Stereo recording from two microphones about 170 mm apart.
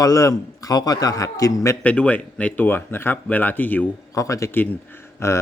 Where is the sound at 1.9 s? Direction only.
5° left (ahead or behind).